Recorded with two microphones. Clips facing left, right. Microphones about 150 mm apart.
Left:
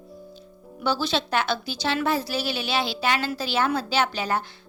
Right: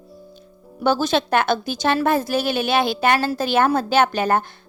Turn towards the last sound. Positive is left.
turn(degrees=-50)  # may be behind; listen again after turning